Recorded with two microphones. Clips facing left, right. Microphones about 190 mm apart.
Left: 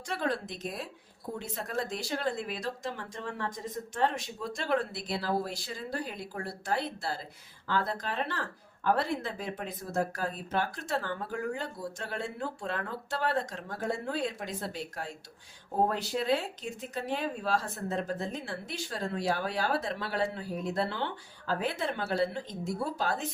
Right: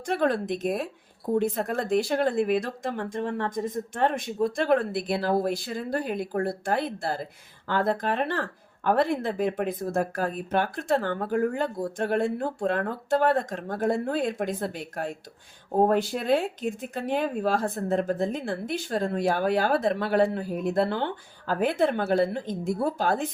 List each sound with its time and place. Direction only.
0.0 s speech: 55° right (ahead or behind)